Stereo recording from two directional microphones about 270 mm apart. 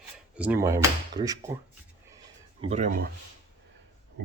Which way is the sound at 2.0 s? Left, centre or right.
Centre.